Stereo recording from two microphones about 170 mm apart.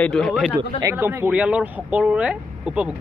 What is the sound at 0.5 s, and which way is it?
Speech, 15° right (ahead or behind).